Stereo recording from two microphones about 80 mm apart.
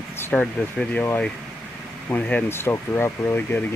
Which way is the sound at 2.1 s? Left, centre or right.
Centre.